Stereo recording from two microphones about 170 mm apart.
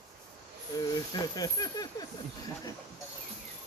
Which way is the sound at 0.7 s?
20° left (ahead or behind).